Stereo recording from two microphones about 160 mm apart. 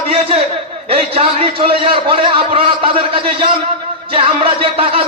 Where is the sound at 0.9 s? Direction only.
35° right (ahead or behind).